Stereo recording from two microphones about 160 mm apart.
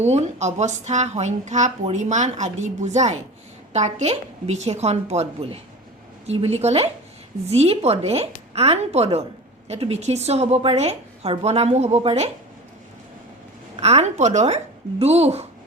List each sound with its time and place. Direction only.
0.0 s a woman's voice: 45° right (ahead or behind)
13.7 s speech: 40° right (ahead or behind)